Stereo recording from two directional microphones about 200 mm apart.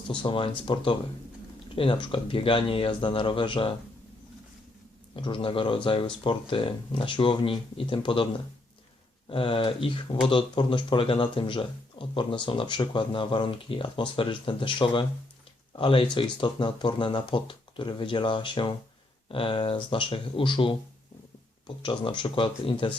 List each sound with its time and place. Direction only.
0.1 s speech: 25° left (ahead or behind)
5.1 s speech: 25° left (ahead or behind)
9.3 s speech: 25° left (ahead or behind)
21.8 s speech: 25° left (ahead or behind)